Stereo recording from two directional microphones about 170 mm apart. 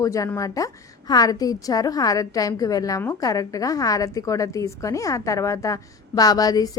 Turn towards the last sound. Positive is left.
turn(degrees=20)  # may be behind; listen again after turning